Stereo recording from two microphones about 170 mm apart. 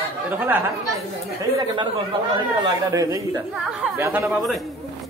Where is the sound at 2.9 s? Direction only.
20° right (ahead or behind).